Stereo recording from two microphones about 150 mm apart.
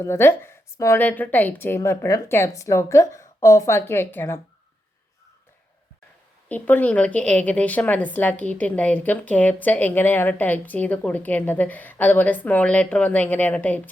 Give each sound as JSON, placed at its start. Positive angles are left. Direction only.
{"t": 0.0, "sound": "a woman's voice", "side_deg": 15}
{"t": 6.5, "sound": "a woman's voice", "side_deg": 10}